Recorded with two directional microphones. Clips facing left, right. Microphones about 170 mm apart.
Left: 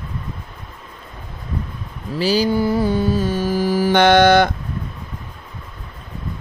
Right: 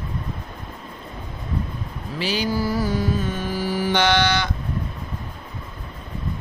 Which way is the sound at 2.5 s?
25° left (ahead or behind).